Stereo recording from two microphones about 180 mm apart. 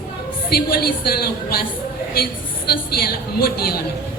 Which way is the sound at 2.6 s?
60° left (ahead or behind).